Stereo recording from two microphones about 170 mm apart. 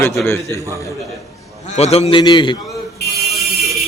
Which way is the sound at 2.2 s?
25° left (ahead or behind).